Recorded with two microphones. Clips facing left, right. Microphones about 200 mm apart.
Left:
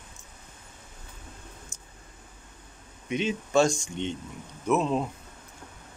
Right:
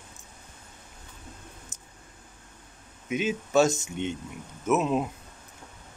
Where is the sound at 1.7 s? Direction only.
20° right (ahead or behind).